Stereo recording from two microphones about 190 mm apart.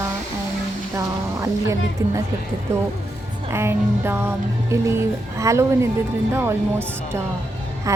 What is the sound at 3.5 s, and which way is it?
Music, 15° right (ahead or behind).